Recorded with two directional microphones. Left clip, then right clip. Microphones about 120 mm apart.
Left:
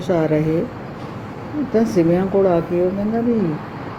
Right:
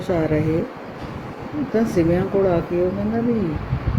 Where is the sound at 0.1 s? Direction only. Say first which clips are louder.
Left 3 dB; 30° left (ahead or behind).